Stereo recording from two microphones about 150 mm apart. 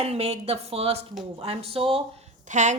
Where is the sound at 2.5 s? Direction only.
55° right (ahead or behind).